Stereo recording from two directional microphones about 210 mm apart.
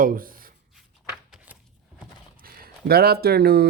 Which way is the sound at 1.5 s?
10° right (ahead or behind).